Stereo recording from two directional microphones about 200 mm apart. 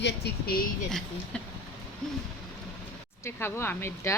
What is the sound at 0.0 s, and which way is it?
Speech, 50° left (ahead or behind).